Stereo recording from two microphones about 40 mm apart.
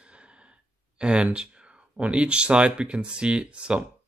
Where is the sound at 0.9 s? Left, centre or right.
Right.